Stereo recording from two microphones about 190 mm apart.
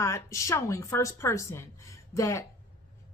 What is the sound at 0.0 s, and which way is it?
Speech, 15° left (ahead or behind).